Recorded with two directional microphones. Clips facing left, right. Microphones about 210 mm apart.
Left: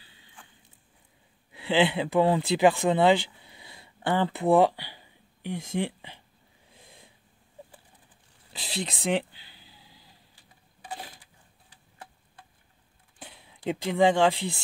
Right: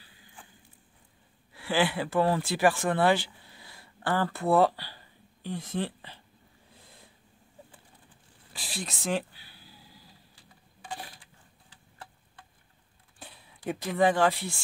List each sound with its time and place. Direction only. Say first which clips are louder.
0.0 s a sound: right 1 dB; 25° left (ahead or behind)
1.5 s speech: left 3 dB; 20° left (ahead or behind)
6.8 s snort: left 3 dB; 20° left (ahead or behind)
8.5 s speech: left 5 dB; 20° left (ahead or behind)
13.7 s speech: left 3 dB; 15° left (ahead or behind)